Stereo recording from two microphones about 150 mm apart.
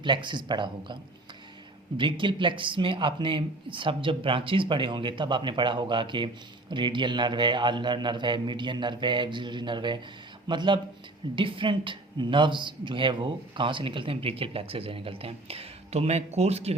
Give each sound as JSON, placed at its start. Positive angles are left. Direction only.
{"t": 0.0, "sound": "speech", "side_deg": -30}
{"t": 2.0, "sound": "speech", "side_deg": -35}